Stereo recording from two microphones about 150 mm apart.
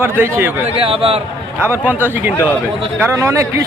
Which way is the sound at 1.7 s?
15° right (ahead or behind).